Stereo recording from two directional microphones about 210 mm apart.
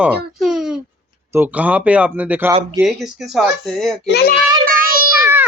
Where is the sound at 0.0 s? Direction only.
5° right (ahead or behind).